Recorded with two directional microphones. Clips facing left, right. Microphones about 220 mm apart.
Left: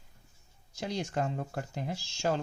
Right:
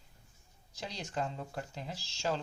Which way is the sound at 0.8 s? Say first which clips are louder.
Left 5 dB; 50° left (ahead or behind).